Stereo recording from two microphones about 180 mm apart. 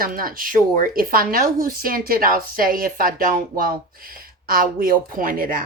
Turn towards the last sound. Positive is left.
turn(degrees=-50)  # may be behind; listen again after turning